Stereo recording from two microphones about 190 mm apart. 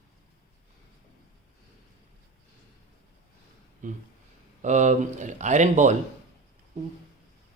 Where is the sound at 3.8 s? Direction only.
40° right (ahead or behind).